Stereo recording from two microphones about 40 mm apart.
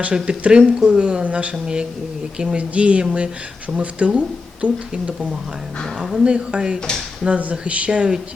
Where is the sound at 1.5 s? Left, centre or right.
Centre.